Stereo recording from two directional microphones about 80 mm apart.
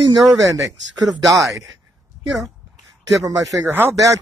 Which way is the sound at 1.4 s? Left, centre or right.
Centre.